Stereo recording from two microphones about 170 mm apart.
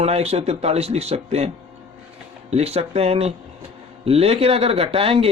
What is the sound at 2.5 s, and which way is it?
Speech, 40° right (ahead or behind).